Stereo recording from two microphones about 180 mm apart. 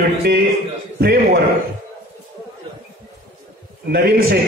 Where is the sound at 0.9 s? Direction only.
65° right (ahead or behind).